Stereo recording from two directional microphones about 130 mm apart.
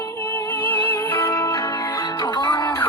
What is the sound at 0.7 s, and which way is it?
Music, 15° left (ahead or behind).